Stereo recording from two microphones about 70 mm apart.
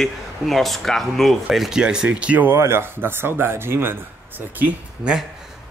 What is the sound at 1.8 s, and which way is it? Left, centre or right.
Speech, centre.